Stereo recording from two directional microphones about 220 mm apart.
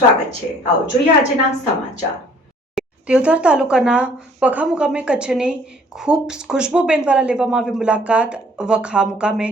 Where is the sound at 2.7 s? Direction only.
5° right (ahead or behind).